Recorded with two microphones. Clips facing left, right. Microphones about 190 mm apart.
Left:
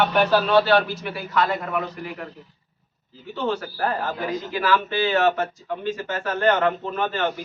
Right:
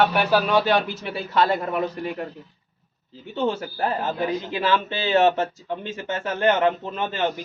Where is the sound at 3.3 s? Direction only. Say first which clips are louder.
Right 1 dB; 25° right (ahead or behind).